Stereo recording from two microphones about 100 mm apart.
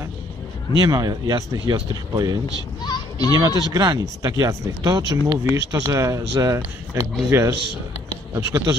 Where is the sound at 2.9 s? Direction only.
40° left (ahead or behind).